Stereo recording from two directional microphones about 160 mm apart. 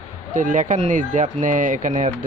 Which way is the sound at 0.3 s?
55° right (ahead or behind).